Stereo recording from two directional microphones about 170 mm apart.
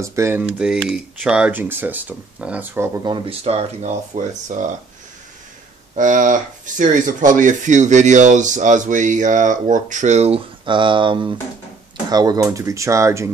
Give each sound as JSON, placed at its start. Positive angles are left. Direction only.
{"t": 0.0, "sound": "speech", "side_deg": -15}
{"t": 3.1, "sound": "speech", "side_deg": -30}
{"t": 5.9, "sound": "speech", "side_deg": -50}